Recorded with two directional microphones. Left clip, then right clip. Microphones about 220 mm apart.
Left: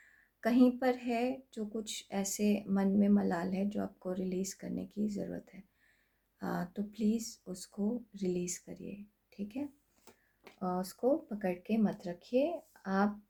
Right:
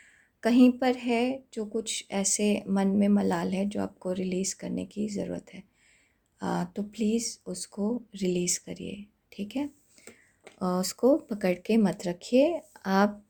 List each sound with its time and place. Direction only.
0.4 s a woman's voice: 30° right (ahead or behind)